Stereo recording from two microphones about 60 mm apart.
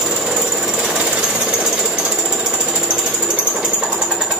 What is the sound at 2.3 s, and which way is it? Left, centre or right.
Jackhammer, right.